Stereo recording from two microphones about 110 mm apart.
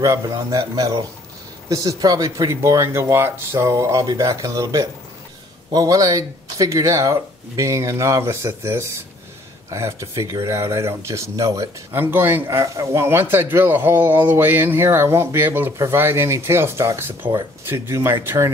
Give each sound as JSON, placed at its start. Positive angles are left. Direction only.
{"t": 0.0, "sound": "speech", "side_deg": -30}